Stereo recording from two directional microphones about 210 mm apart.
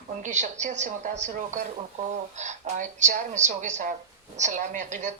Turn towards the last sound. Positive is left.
turn(degrees=-35)  # may be behind; listen again after turning